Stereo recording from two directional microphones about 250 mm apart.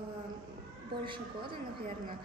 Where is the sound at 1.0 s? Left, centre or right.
Centre.